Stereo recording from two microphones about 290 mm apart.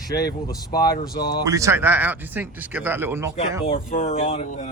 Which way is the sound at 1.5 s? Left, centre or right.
Centre.